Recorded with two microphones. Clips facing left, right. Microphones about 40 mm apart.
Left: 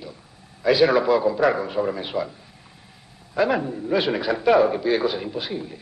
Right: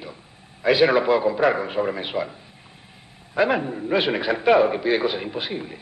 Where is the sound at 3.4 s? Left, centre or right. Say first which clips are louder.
Right 1 dB; right.